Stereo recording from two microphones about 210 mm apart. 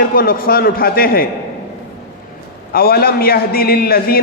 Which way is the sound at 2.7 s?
45° left (ahead or behind).